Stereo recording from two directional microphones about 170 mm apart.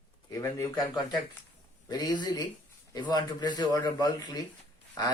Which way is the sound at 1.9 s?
25° left (ahead or behind).